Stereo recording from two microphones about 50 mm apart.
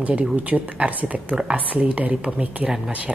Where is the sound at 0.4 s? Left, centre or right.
Right.